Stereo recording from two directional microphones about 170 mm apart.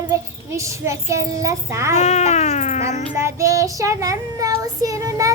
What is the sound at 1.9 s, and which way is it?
Speech, 40° left (ahead or behind).